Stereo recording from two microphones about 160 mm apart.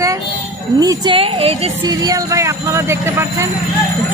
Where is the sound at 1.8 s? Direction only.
20° right (ahead or behind).